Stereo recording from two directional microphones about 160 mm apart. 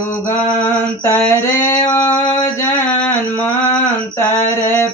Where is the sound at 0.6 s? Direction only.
15° left (ahead or behind).